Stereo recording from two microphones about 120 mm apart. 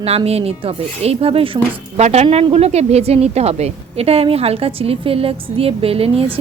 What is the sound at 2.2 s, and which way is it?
A woman's voice, 55° right (ahead or behind).